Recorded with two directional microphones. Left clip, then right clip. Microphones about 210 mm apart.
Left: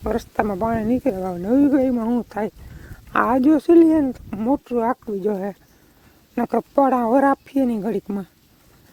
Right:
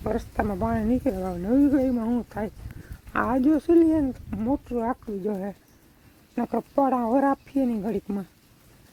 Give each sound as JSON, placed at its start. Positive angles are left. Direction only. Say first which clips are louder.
{"t": 0.1, "sound": "speech", "louder": "left 6 dB", "side_deg": 40}